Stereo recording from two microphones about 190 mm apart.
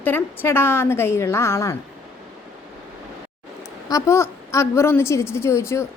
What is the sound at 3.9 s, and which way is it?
A woman's voice, 15° left (ahead or behind).